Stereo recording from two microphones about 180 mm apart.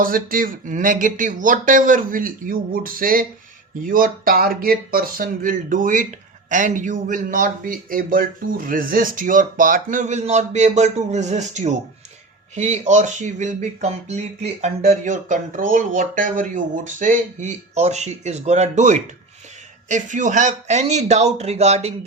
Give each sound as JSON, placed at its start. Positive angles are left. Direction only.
{"t": 0.0, "sound": "a man's voice", "side_deg": -50}